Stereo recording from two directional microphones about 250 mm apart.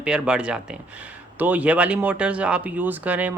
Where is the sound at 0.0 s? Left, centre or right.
Centre.